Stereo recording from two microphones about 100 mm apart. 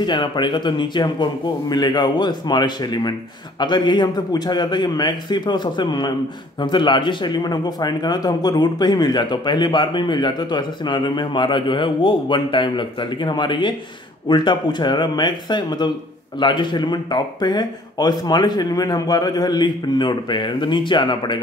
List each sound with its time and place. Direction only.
0.0 s a man's voice: 50° left (ahead or behind)